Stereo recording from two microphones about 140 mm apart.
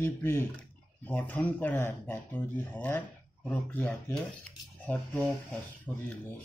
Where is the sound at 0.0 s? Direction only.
15° left (ahead or behind).